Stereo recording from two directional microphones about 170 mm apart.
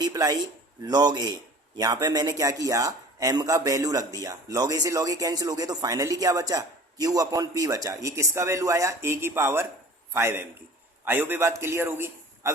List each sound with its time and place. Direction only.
0.0 s a man's voice: 20° right (ahead or behind)